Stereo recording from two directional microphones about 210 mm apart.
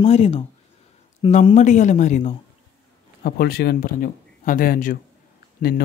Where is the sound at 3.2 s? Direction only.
50° left (ahead or behind).